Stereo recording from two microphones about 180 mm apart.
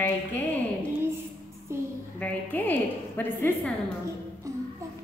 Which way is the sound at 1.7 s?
15° right (ahead or behind).